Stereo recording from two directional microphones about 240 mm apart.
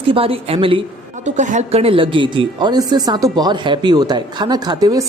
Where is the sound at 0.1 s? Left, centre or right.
Right.